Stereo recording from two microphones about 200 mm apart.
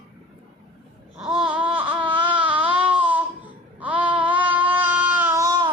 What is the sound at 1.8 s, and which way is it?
Baby cry, 25° right (ahead or behind).